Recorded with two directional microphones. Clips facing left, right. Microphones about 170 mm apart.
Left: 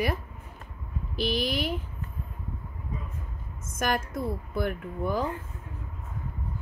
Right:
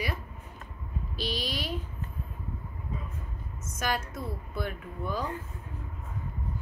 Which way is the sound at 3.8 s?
50° left (ahead or behind).